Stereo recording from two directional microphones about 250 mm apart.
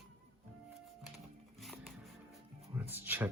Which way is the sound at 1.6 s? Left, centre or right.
Centre.